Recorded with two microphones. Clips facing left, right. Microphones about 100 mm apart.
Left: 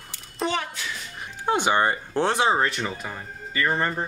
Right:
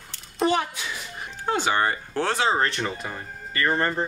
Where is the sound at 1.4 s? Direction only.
15° left (ahead or behind).